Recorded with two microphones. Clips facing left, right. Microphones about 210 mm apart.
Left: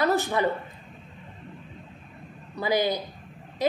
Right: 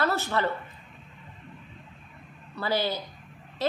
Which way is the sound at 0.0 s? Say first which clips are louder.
Left 3 dB; 15° left (ahead or behind).